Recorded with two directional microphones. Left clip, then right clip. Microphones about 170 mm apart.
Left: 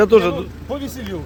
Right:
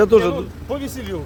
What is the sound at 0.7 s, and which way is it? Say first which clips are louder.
Speech: right 1 dB; 40° right (ahead or behind).